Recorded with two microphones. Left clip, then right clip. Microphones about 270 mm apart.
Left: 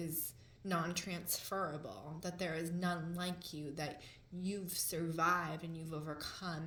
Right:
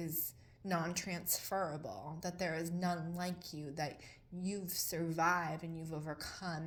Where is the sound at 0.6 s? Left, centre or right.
Right.